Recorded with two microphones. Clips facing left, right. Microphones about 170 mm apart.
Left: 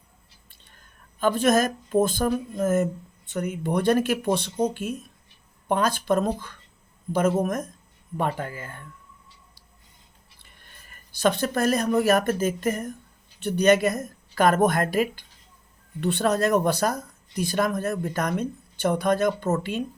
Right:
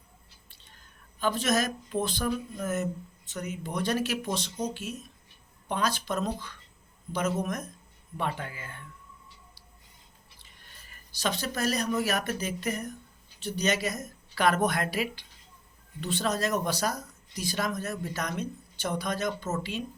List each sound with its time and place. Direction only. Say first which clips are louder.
1.2 s speech: left 7 dB; 50° left (ahead or behind)
10.4 s speech: left 4 dB; 55° left (ahead or behind)